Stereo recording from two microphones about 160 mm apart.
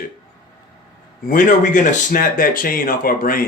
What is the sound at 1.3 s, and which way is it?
Speech, 55° left (ahead or behind).